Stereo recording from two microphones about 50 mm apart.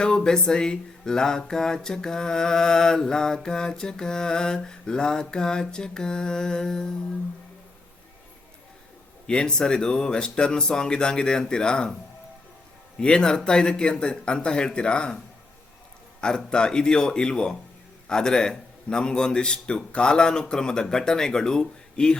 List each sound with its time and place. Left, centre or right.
0.0 s music: centre
9.2 s music: centre
13.0 s music: centre
16.2 s music: centre